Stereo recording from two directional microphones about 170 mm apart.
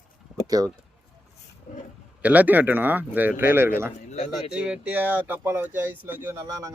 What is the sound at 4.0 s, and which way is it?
Speech, 40° left (ahead or behind).